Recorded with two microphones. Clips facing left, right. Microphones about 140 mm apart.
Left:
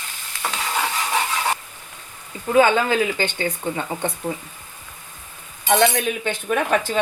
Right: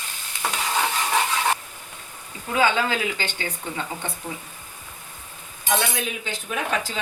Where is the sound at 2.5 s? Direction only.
40° left (ahead or behind).